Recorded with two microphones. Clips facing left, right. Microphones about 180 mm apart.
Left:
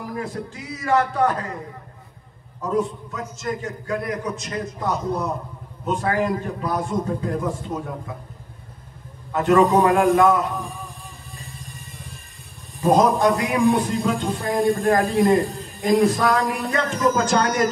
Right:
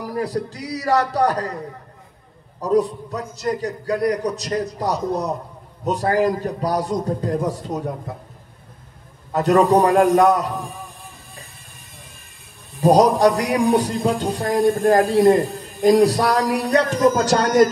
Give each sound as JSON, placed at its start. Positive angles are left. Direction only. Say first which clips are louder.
{"t": 0.0, "sound": "a man's voice", "louder": "right 5 dB", "side_deg": -35}
{"t": 2.6, "sound": "a man's voice", "louder": "right 5 dB", "side_deg": -35}
{"t": 9.3, "sound": "a man's voice", "louder": "right 1 dB", "side_deg": -40}
{"t": 12.8, "sound": "a man's voice", "louder": "right 3 dB", "side_deg": -40}